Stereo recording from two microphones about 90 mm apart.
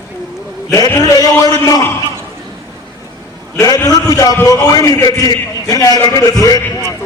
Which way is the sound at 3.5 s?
45° left (ahead or behind).